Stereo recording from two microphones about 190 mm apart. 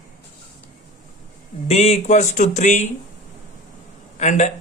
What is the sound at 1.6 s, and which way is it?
Speech, 35° left (ahead or behind).